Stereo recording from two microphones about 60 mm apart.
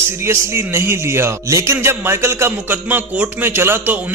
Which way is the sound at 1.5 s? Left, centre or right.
Right.